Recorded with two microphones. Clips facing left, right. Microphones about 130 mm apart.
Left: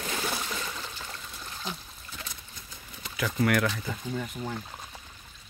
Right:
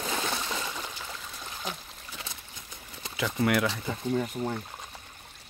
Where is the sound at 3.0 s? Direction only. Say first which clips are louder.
Even; 25° right (ahead or behind).